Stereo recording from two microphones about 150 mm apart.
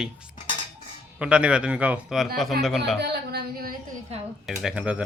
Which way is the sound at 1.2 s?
10° right (ahead or behind).